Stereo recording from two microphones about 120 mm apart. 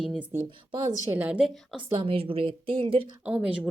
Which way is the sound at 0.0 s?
5° right (ahead or behind).